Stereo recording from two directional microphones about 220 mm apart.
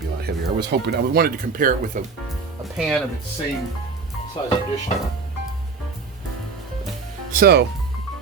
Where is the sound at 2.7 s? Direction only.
Centre (ahead or behind).